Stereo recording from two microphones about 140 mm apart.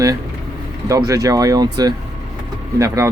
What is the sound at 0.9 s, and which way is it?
Speech, 25° right (ahead or behind).